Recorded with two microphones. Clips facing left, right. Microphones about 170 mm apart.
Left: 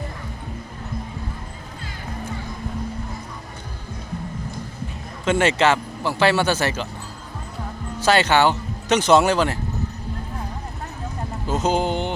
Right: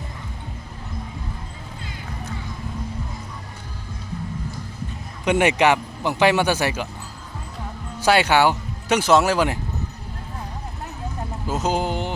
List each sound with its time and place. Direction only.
5.2 s speech: 15° right (ahead or behind)
8.0 s speech: 10° right (ahead or behind)
11.4 s music: 5° right (ahead or behind)